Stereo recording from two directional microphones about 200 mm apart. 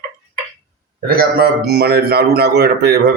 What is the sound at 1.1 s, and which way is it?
A man's voice, 50° right (ahead or behind).